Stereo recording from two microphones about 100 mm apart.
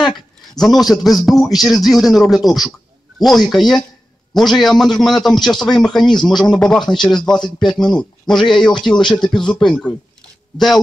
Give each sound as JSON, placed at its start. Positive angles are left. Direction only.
{"t": 0.0, "sound": "a man's voice", "side_deg": 0}